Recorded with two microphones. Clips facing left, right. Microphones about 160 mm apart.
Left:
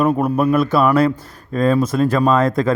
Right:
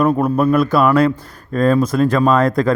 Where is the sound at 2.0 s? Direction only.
25° left (ahead or behind).